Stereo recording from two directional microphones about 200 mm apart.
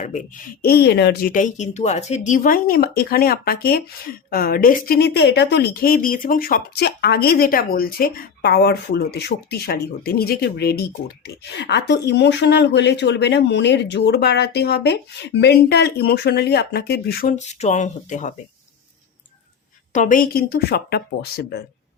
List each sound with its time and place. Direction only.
0.0 s speech: 40° left (ahead or behind); by 1.3 s 55° left (ahead or behind)
1.3 s speech: 40° left (ahead or behind)
19.9 s speech: 40° left (ahead or behind)